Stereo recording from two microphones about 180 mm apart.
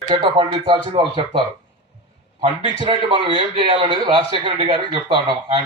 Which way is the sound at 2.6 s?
25° right (ahead or behind).